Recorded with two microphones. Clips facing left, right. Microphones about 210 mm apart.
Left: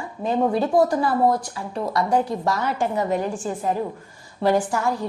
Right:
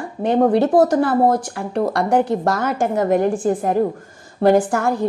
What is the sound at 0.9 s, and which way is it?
A woman's voice, 75° right (ahead or behind).